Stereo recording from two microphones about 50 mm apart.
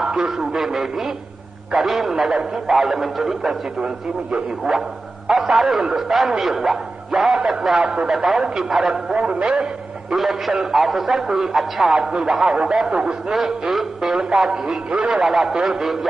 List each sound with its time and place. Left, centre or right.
0.0 s a man's voice: centre
5.3 s speech: centre
7.8 s a man's voice: right
8.1 s a man's voice: centre
9.1 s a man's voice: right
10.1 s speech: centre
15.2 s a man's voice: centre